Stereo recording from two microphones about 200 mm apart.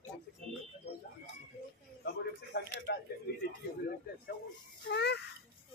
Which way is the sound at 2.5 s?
50° left (ahead or behind).